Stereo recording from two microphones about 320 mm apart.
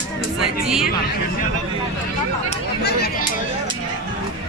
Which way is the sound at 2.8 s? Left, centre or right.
Left.